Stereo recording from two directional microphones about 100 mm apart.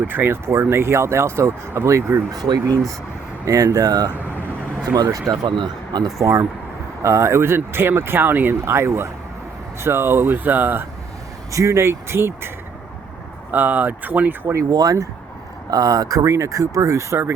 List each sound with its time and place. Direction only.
0.1 s speech: 20° right (ahead or behind)
2.4 s speech: 40° right (ahead or behind)
5.1 s speech: 35° right (ahead or behind)
5.5 s speech: 50° right (ahead or behind)
6.1 s speech: 30° right (ahead or behind)
11.5 s speech: 30° right (ahead or behind)
13.5 s speech: 15° right (ahead or behind)
14.7 s speech: 40° right (ahead or behind)